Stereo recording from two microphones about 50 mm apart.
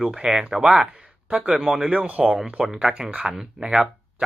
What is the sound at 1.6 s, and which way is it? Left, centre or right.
Speech, centre.